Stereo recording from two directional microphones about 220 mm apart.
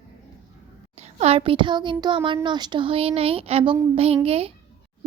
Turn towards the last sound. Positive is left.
turn(degrees=-25)  # may be behind; listen again after turning